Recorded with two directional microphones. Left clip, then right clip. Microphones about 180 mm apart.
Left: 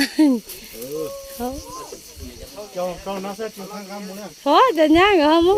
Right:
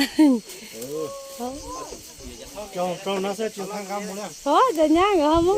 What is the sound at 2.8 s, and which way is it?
Speech, 60° right (ahead or behind).